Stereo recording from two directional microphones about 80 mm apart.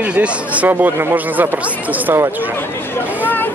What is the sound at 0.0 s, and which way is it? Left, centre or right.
Speech, centre.